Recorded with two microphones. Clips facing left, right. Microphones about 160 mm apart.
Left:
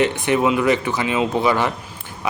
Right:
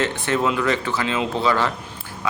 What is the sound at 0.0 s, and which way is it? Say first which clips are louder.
Speech: left 4 dB; 15° left (ahead or behind).